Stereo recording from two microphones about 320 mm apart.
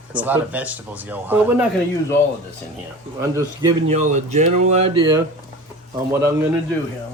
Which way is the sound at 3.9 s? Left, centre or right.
Right.